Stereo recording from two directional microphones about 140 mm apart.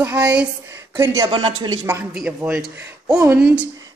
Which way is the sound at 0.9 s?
20° right (ahead or behind).